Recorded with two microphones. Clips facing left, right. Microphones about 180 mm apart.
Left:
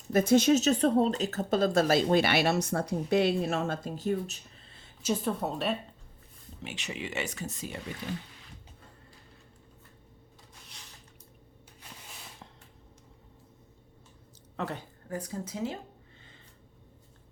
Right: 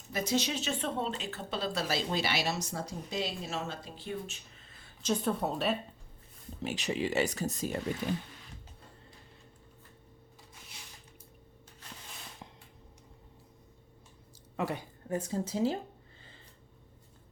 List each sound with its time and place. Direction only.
0.1 s a woman's voice: 50° left (ahead or behind)
5.0 s a woman's voice: centre (ahead or behind)
6.6 s speech: 35° right (ahead or behind)
14.5 s a woman's voice: 10° right (ahead or behind)
15.1 s a woman's voice: 25° right (ahead or behind)